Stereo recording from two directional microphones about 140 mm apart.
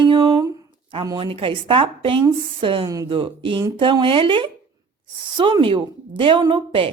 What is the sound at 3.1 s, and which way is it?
Speech, 40° right (ahead or behind).